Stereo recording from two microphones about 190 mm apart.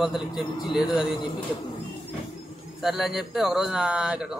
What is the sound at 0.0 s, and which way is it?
Speech, centre (ahead or behind).